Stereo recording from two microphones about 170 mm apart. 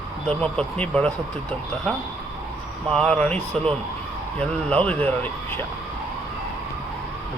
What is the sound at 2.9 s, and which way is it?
Speech, 5° left (ahead or behind).